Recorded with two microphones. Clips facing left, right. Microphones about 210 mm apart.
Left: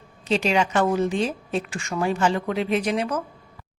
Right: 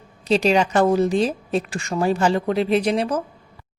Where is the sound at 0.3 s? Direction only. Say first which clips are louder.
Right 4 dB; 35° right (ahead or behind).